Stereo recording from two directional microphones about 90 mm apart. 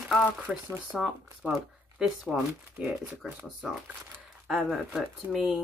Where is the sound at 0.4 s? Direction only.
20° right (ahead or behind).